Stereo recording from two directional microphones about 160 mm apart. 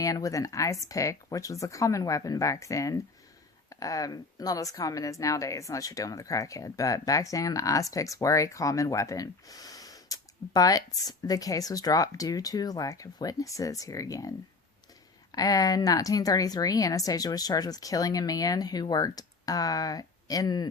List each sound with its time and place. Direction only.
0.0 s speech: 20° left (ahead or behind)